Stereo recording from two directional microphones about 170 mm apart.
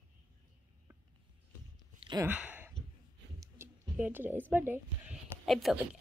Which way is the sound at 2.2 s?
10° right (ahead or behind).